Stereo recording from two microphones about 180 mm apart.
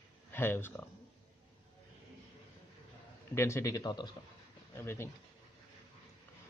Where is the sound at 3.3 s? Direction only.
15° left (ahead or behind).